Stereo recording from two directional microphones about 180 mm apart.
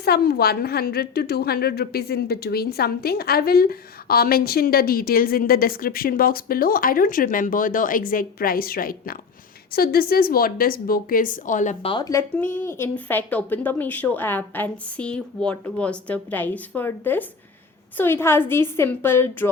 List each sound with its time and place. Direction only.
0.0 s a woman's voice: 60° left (ahead or behind); by 11.9 s 40° left (ahead or behind)
11.9 s a woman's voice: 20° left (ahead or behind)